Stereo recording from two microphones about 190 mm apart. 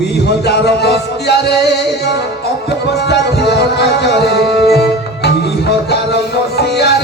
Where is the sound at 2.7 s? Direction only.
60° left (ahead or behind).